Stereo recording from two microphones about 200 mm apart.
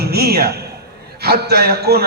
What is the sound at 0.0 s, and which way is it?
A man's voice, 55° right (ahead or behind).